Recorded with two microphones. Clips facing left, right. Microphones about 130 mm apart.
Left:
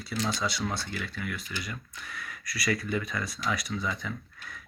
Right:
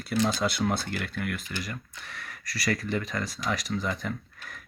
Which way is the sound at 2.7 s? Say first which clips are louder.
Right 1 dB; 45° right (ahead or behind).